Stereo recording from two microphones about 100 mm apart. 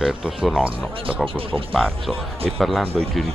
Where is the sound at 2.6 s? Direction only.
5° left (ahead or behind).